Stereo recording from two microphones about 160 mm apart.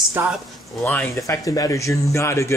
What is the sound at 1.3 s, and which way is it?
Speech, 20° left (ahead or behind).